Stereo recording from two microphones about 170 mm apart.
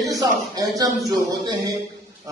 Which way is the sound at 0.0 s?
20° right (ahead or behind).